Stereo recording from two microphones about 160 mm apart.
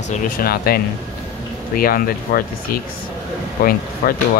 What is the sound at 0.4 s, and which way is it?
Speech, 70° left (ahead or behind).